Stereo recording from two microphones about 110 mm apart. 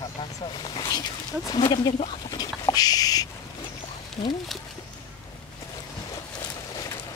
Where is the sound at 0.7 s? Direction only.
40° left (ahead or behind).